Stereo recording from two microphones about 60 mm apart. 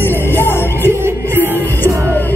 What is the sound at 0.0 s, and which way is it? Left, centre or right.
Music, left.